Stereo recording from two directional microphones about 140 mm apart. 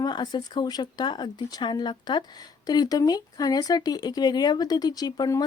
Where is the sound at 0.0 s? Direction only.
30° left (ahead or behind).